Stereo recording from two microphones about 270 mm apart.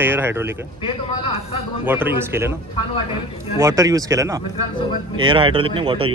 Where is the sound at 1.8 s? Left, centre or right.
Centre.